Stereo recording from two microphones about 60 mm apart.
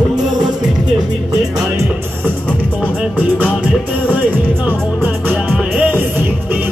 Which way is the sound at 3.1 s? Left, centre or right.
Right.